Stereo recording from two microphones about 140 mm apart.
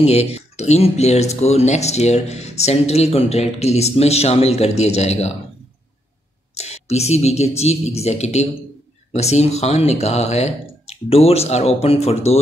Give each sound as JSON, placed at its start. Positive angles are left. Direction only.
{"t": 0.0, "sound": "speech", "side_deg": 50}
{"t": 6.5, "sound": "speech", "side_deg": 50}